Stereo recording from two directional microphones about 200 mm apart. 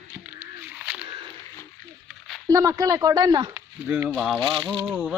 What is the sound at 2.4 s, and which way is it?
Speech, 15° right (ahead or behind).